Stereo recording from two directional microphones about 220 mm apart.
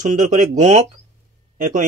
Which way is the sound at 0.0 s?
35° right (ahead or behind).